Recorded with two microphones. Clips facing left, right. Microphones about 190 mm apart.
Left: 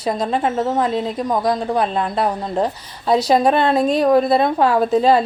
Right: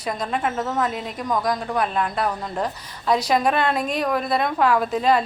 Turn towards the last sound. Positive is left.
turn(degrees=30)  # may be behind; listen again after turning